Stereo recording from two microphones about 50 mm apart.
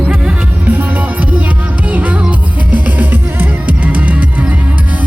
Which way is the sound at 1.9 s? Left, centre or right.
Right.